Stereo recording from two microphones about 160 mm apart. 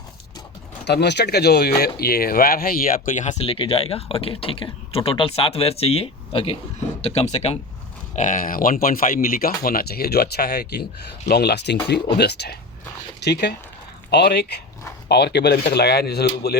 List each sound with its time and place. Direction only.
0.9 s speech: 90° left; by 3.5 s 50° left (ahead or behind)
3.5 s speech: 35° left (ahead or behind)
8.1 s speech: 50° left (ahead or behind); by 16.6 s 85° left